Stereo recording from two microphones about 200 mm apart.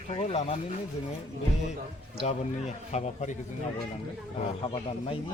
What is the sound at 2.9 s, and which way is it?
Speech, 35° left (ahead or behind).